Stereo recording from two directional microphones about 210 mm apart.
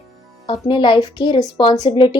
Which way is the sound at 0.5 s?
20° left (ahead or behind).